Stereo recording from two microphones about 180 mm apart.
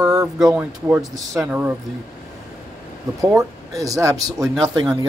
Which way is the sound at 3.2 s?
20° right (ahead or behind).